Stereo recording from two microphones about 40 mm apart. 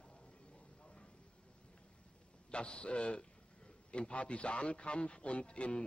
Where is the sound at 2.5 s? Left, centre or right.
Left.